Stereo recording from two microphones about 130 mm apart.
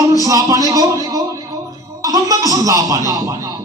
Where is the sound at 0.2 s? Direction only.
25° right (ahead or behind).